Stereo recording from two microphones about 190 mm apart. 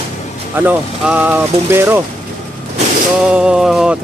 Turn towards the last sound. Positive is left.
turn(degrees=-5)  # may be behind; listen again after turning